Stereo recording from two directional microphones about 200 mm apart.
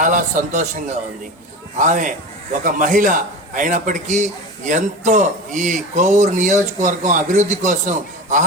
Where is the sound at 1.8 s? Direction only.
40° right (ahead or behind).